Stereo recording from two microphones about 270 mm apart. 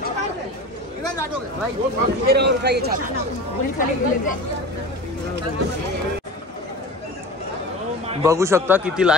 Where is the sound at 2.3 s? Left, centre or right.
Right.